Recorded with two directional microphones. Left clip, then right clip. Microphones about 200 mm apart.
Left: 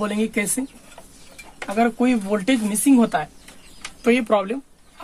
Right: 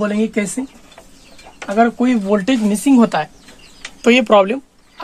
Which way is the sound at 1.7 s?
15° right (ahead or behind).